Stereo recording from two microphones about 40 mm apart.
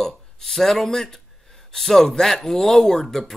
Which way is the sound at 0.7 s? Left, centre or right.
Centre.